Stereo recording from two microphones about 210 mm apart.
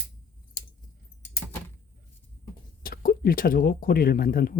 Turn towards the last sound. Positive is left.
turn(degrees=45)  # may be behind; listen again after turning